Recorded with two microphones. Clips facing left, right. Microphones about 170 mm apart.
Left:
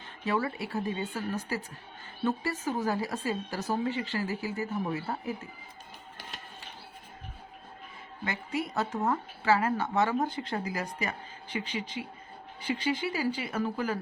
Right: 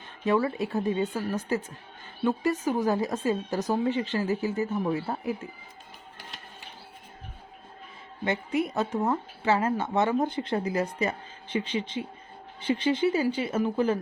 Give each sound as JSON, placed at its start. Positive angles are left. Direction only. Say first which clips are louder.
{"t": 0.4, "sound": "a woman's voice", "louder": "right 5 dB", "side_deg": -20}
{"t": 8.2, "sound": "a woman's voice", "louder": "right 6 dB", "side_deg": -20}